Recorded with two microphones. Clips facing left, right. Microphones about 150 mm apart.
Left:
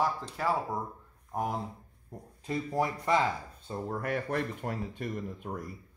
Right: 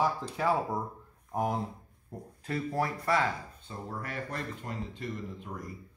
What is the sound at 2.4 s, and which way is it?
Speech, 15° left (ahead or behind).